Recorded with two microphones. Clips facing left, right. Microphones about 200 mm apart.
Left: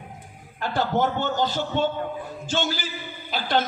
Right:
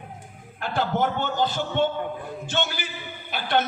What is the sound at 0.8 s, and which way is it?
A man's voice, 50° right (ahead or behind).